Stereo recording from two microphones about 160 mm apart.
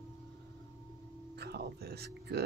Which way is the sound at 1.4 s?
90° right.